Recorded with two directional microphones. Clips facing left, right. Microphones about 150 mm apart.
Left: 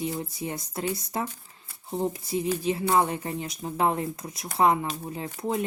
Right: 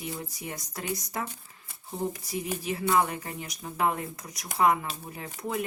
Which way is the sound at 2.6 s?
30° left (ahead or behind).